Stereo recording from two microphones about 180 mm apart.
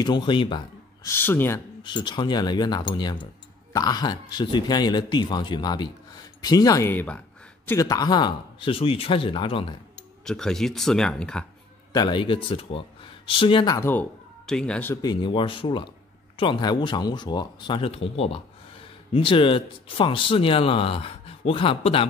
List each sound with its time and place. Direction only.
0.0 s speech: 25° left (ahead or behind)
1.0 s speech: 10° left (ahead or behind)
1.8 s speech: 25° left (ahead or behind)
10.2 s speech: 5° left (ahead or behind)
11.9 s speech: 25° left (ahead or behind)
13.7 s speech: 10° left (ahead or behind)
15.0 s speech: 25° left (ahead or behind)